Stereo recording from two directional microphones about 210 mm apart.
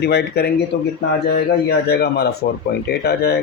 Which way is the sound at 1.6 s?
50° left (ahead or behind).